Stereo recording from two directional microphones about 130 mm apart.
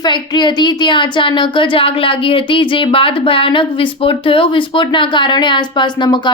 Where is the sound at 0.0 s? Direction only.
35° left (ahead or behind).